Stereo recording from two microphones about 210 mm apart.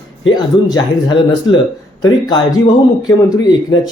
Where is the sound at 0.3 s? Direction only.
20° left (ahead or behind).